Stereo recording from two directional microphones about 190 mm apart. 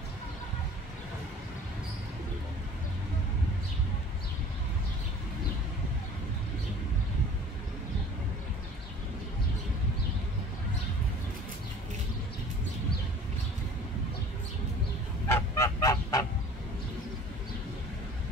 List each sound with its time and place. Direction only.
15.2 s goose: 15° left (ahead or behind)